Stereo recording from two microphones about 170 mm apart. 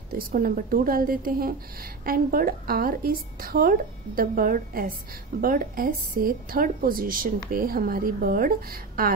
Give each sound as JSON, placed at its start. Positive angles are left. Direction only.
{"t": 0.1, "sound": "a woman's voice", "side_deg": -60}